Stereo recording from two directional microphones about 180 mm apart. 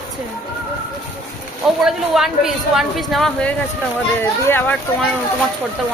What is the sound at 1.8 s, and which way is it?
A woman's voice, centre (ahead or behind).